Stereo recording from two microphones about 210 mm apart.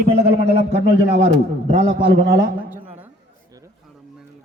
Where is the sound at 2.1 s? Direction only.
55° right (ahead or behind).